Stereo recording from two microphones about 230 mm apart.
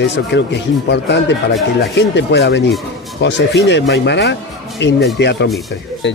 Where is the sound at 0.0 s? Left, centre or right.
Left.